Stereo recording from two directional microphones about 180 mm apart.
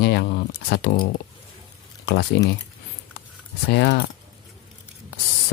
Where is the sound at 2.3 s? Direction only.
65° left (ahead or behind).